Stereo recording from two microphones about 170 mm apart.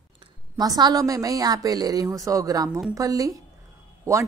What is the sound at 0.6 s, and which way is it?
Speech, 20° right (ahead or behind).